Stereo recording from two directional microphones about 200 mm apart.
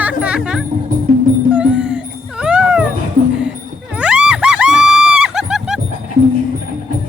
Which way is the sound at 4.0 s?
5° right (ahead or behind).